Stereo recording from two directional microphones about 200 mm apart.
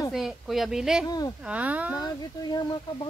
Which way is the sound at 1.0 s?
20° left (ahead or behind).